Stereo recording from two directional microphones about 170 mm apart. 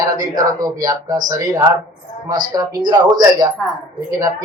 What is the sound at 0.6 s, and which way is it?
Speech, 20° right (ahead or behind).